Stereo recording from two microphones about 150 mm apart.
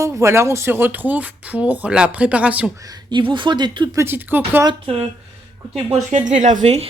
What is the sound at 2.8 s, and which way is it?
Speech, 25° right (ahead or behind).